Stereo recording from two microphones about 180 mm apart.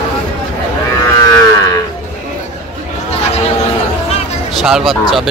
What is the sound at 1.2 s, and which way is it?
Moo, 20° left (ahead or behind).